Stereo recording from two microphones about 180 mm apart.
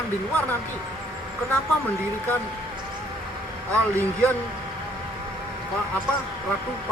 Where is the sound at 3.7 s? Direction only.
10° left (ahead or behind).